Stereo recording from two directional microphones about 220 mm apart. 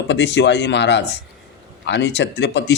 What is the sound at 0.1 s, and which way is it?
A man's voice, 55° left (ahead or behind).